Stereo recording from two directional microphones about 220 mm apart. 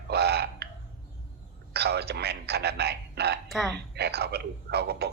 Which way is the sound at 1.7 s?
50° right (ahead or behind).